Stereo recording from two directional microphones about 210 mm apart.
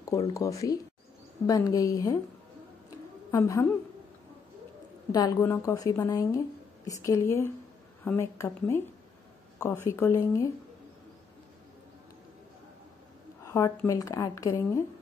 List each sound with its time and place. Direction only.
0.3 s a woman's voice: 15° left (ahead or behind)
3.3 s a woman's voice: 15° left (ahead or behind)
5.1 s a woman's voice: 15° left (ahead or behind)
13.4 s a woman's voice: 15° left (ahead or behind)